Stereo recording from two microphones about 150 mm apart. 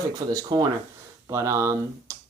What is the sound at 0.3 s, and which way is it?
Speech, 25° right (ahead or behind).